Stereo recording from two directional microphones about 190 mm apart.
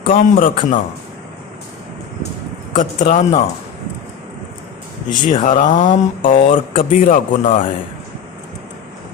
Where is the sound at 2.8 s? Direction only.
45° left (ahead or behind).